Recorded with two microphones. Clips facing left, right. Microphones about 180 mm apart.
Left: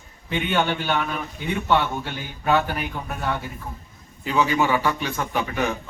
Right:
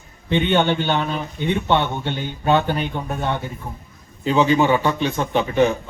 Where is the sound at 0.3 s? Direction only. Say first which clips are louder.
Right 5 dB; 25° right (ahead or behind).